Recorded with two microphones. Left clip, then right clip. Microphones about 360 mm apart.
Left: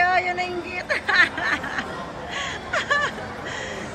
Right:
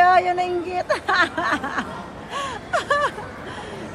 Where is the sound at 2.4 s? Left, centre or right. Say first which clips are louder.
Right 2 dB; centre.